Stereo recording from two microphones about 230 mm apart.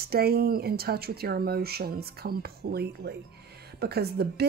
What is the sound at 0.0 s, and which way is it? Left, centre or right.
Speech, right.